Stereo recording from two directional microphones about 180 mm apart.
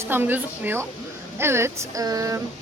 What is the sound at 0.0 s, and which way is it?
Speech, 10° right (ahead or behind).